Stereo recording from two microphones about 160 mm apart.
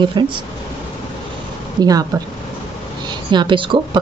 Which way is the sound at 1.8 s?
25° right (ahead or behind).